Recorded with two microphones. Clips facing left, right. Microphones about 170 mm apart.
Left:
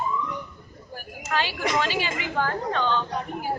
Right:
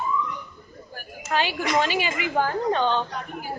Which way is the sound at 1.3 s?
15° right (ahead or behind).